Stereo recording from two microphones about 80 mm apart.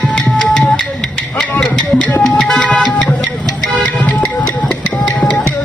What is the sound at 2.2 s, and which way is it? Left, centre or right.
Music, centre.